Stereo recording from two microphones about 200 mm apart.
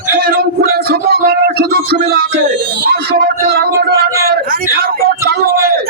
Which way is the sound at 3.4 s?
50° right (ahead or behind).